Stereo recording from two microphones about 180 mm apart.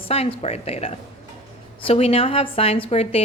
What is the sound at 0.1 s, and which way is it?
A woman's voice, 35° left (ahead or behind).